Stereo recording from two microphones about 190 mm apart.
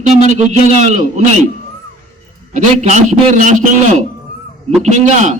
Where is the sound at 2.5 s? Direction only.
40° right (ahead or behind).